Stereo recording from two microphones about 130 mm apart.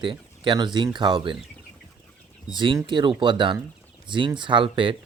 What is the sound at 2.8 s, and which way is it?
Speech, 35° right (ahead or behind).